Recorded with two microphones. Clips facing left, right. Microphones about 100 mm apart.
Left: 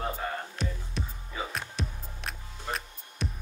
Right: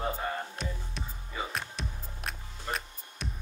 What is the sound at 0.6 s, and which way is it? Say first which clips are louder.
Music: left 3 dB; centre (ahead or behind).